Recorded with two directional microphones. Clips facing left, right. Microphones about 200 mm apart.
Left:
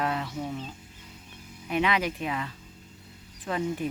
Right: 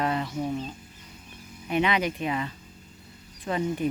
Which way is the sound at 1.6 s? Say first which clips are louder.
Right 2 dB; centre (ahead or behind).